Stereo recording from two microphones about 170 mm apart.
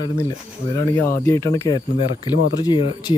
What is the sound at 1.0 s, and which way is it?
Speech, 15° left (ahead or behind).